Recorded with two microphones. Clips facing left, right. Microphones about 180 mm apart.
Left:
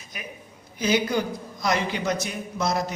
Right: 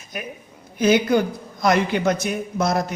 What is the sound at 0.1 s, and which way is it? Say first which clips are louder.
Speech: right 7 dB; 50° right (ahead or behind).